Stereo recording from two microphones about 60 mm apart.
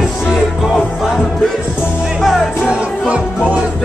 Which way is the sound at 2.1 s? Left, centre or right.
Centre.